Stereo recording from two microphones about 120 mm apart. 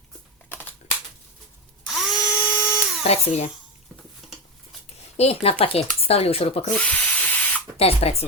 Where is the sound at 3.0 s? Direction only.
65° left (ahead or behind).